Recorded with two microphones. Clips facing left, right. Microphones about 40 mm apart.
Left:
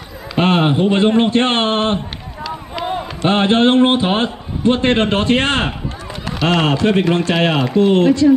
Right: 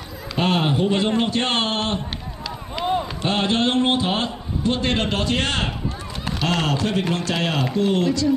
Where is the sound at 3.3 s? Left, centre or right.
Left.